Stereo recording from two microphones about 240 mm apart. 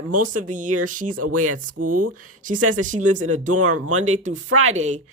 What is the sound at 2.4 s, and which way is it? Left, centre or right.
Speech, right.